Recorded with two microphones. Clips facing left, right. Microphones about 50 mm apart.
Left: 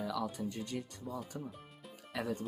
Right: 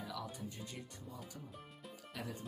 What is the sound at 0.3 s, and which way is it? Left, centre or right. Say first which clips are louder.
Speech: left 8 dB; left.